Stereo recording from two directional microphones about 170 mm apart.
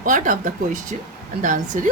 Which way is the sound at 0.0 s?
50° right (ahead or behind).